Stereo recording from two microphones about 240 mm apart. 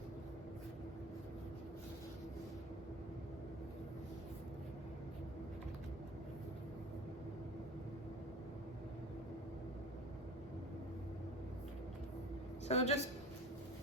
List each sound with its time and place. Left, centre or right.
12.6 s a woman's voice: left